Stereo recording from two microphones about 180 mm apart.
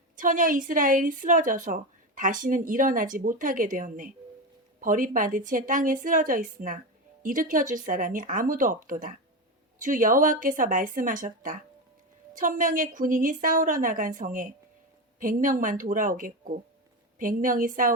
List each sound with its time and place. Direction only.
0.2 s a woman's voice: 50° right (ahead or behind)